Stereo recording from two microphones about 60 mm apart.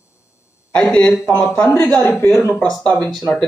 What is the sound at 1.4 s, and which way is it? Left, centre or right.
Speech, centre.